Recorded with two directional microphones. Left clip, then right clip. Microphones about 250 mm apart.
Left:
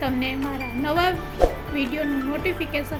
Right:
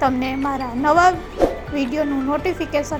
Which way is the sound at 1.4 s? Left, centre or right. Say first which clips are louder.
Right 2 dB; centre.